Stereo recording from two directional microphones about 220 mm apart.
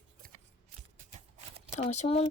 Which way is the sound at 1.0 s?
30° right (ahead or behind).